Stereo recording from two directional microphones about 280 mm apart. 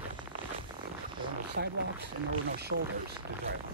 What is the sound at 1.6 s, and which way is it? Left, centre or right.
Speech, right.